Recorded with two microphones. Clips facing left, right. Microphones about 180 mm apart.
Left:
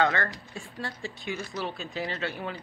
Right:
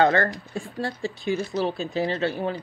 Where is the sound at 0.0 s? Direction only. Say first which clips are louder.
Right 6 dB; 35° right (ahead or behind).